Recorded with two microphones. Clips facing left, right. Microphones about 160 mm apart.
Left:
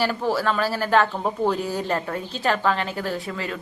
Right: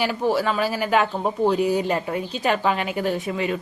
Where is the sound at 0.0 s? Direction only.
15° right (ahead or behind).